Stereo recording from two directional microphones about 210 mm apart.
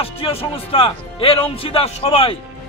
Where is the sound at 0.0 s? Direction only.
25° left (ahead or behind).